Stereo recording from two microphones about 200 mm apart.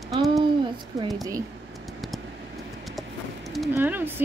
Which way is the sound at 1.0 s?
15° right (ahead or behind).